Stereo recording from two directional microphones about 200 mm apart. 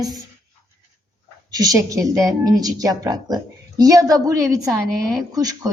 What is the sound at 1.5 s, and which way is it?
A woman's voice, 20° right (ahead or behind).